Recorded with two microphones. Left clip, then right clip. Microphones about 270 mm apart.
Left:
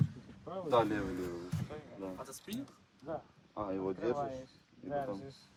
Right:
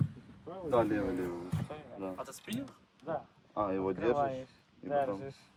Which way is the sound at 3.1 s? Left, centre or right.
Right.